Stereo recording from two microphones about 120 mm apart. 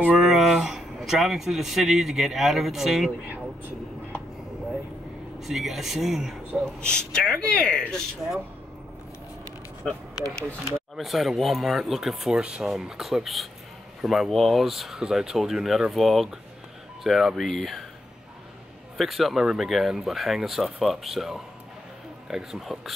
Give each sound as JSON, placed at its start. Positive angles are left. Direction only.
{"t": 0.0, "sound": "speech", "side_deg": -5}
{"t": 5.4, "sound": "speech", "side_deg": 0}
{"t": 11.0, "sound": "speech", "side_deg": 0}
{"t": 18.9, "sound": "speech", "side_deg": 0}